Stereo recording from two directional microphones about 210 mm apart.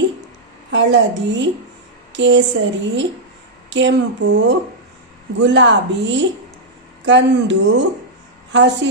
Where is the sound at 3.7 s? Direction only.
60° right (ahead or behind).